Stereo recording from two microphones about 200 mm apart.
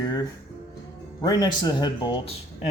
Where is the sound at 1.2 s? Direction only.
20° left (ahead or behind).